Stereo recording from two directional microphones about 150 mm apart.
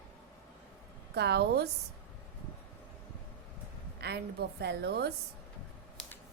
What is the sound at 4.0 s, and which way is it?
A woman's voice, 90° right.